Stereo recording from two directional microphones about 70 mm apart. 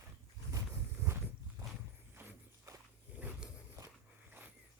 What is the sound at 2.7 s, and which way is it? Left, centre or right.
Wild animals, right.